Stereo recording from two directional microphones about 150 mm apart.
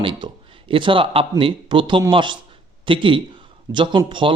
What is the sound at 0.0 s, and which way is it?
A man's voice, 35° right (ahead or behind).